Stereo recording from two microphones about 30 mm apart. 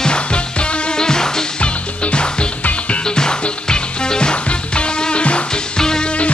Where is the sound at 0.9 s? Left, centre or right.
Left.